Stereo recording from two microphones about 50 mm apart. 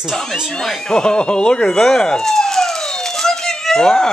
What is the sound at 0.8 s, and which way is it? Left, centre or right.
Speech, centre.